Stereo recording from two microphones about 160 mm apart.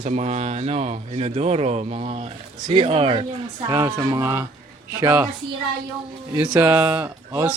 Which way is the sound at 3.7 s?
20° right (ahead or behind).